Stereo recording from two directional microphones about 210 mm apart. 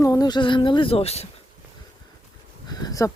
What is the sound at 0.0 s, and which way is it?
Speech, 15° left (ahead or behind).